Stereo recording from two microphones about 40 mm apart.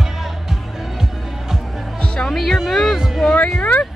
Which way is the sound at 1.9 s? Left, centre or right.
Left.